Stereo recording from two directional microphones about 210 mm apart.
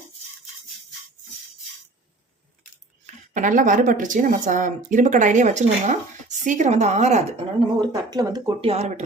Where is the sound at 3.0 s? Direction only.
35° right (ahead or behind).